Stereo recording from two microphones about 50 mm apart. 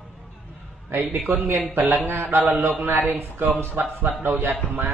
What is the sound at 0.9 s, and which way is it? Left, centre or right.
A man's voice, right.